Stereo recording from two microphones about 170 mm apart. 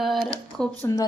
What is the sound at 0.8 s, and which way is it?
Speech, 20° left (ahead or behind).